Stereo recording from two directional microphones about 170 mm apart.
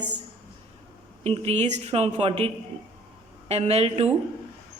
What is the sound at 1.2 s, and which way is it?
Speech, 35° right (ahead or behind).